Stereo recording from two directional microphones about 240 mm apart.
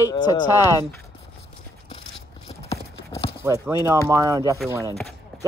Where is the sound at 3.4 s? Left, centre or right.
Centre.